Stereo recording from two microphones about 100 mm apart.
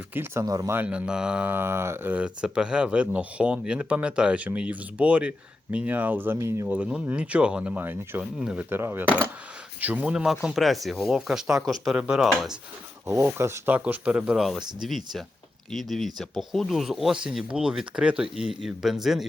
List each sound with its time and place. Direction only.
0.1 s speech: 20° right (ahead or behind)
0.4 s speech: 35° right (ahead or behind)
0.7 s speech: 15° right (ahead or behind)
2.1 s speech: 10° right (ahead or behind); by 6.7 s 25° right (ahead or behind)
6.7 s speech: 15° right (ahead or behind)
8.2 s speech: 10° right (ahead or behind)
8.7 s speech: 25° right (ahead or behind); by 12.5 s 5° right (ahead or behind)
13.1 s speech: 25° right (ahead or behind)
14.8 s speech: centre (ahead or behind)